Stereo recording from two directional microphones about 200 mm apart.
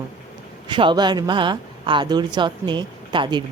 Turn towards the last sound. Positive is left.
turn(degrees=-20)  # may be behind; listen again after turning